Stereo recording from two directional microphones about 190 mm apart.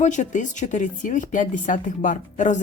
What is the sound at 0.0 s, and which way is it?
A woman's voice, 40° left (ahead or behind).